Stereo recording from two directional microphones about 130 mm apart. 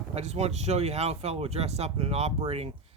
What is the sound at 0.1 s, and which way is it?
Speech, 55° right (ahead or behind).